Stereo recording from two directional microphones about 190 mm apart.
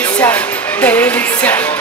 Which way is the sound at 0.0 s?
10° left (ahead or behind).